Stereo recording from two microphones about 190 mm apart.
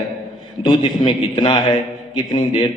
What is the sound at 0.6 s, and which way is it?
A man's voice, 25° left (ahead or behind).